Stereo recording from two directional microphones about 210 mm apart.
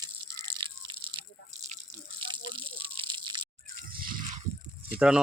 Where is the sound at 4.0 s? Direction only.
40° right (ahead or behind).